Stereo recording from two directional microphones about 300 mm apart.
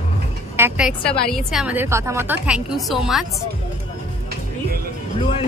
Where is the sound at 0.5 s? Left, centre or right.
Centre.